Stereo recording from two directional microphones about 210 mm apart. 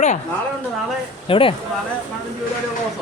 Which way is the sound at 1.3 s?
25° left (ahead or behind).